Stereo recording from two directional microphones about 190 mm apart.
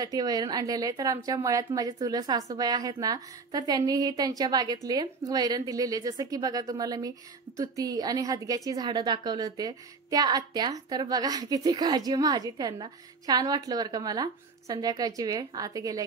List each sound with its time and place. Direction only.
0.0 s a woman's voice: 20° right (ahead or behind)